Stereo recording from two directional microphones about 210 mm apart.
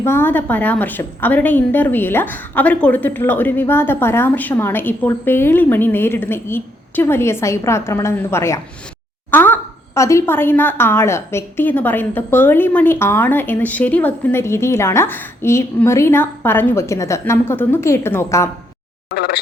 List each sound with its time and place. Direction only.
0.0 s a woman's voice: 10° left (ahead or behind)
19.1 s speech: 50° left (ahead or behind)